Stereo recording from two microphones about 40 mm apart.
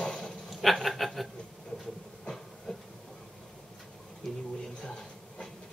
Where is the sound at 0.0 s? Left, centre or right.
Centre.